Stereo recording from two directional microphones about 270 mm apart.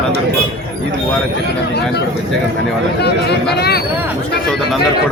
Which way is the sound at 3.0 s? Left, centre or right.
Left.